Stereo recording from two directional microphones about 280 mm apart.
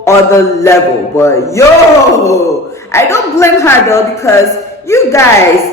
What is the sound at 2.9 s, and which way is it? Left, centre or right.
A woman's voice, centre.